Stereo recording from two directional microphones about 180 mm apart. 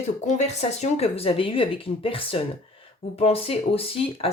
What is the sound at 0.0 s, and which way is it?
Speech, 40° left (ahead or behind).